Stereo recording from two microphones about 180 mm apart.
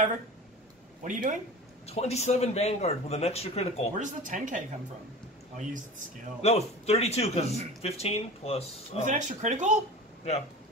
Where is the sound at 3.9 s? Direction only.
45° right (ahead or behind).